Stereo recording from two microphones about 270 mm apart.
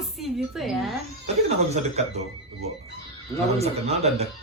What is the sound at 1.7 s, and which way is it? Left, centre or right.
Speech, right.